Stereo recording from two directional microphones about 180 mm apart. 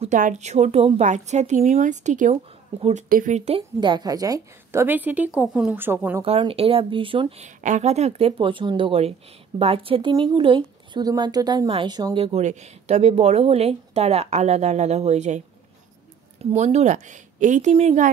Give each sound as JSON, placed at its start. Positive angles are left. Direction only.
{"t": 0.0, "sound": "a woman's voice", "side_deg": -45}
{"t": 6.2, "sound": "a woman's voice", "side_deg": -30}
{"t": 12.3, "sound": "a woman's voice", "side_deg": -40}
{"t": 16.4, "sound": "a woman's voice", "side_deg": -40}